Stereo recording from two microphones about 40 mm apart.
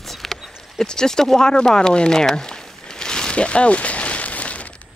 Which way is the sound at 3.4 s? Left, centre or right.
Left.